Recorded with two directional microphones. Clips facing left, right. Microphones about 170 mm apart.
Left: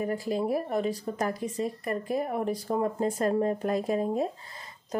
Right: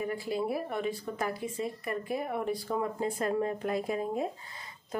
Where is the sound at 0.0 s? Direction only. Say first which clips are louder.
Left 3 dB; 40° left (ahead or behind).